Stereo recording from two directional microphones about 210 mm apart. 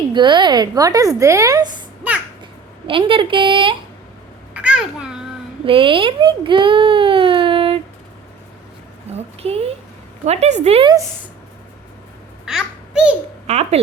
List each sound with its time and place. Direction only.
0.1 s a woman's voice: 20° right (ahead or behind)
2.8 s a woman's voice: 25° right (ahead or behind)
4.5 s babbling: 5° right (ahead or behind)
5.6 s speech: 25° right (ahead or behind)
9.1 s a woman's voice: 30° right (ahead or behind)
12.5 s babbling: 5° right (ahead or behind)
13.5 s speech: 30° right (ahead or behind)